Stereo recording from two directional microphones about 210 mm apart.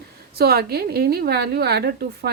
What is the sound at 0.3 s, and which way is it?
A woman's voice, 50° right (ahead or behind).